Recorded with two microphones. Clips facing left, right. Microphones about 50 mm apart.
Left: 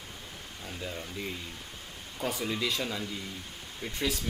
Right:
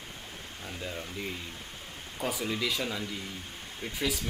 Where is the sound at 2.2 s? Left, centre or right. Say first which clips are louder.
Even; centre.